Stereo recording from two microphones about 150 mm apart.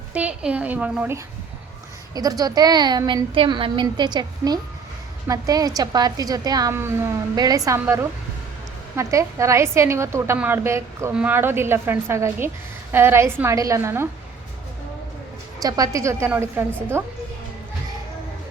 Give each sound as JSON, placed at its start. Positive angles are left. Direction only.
{"t": 0.1, "sound": "a woman's voice", "side_deg": -10}
{"t": 2.1, "sound": "a woman's voice", "side_deg": -25}
{"t": 15.6, "sound": "a woman's voice", "side_deg": -25}